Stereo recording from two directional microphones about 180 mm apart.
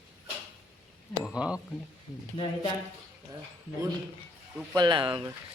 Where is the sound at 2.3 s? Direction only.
30° left (ahead or behind).